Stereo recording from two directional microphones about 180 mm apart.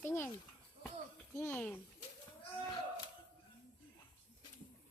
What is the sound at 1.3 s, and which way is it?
Speech, 10° left (ahead or behind).